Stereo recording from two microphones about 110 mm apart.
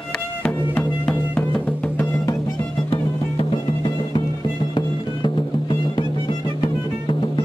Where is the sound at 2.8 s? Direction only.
50° left (ahead or behind).